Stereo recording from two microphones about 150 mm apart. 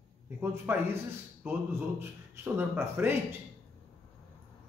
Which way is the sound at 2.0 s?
15° right (ahead or behind).